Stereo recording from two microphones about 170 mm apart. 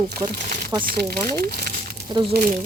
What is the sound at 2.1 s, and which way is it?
Speech, 25° right (ahead or behind).